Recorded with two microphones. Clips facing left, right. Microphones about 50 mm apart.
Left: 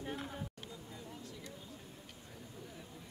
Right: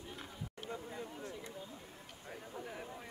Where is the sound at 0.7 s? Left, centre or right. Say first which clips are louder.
Right 5 dB; right.